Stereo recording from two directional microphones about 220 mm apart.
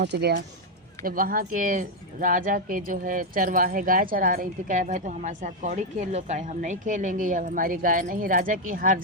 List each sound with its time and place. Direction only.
0.0 s speech: 50° right (ahead or behind)